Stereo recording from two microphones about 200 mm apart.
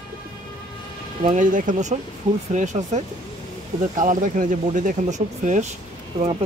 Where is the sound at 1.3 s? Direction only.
40° right (ahead or behind).